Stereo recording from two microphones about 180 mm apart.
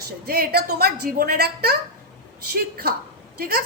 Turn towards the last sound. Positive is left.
turn(degrees=-55)  # may be behind; listen again after turning